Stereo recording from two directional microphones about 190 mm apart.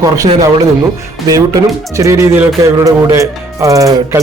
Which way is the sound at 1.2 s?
20° right (ahead or behind).